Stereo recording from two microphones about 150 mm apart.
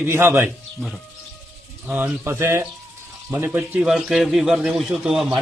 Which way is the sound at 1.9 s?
15° right (ahead or behind).